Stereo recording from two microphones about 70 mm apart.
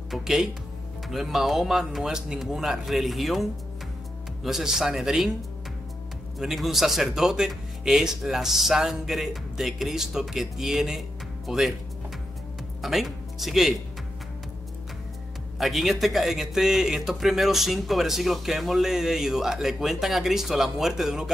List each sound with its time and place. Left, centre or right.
0.1 s a man's voice: centre
6.4 s a man's voice: centre
12.8 s speech: centre
15.6 s a man's voice: centre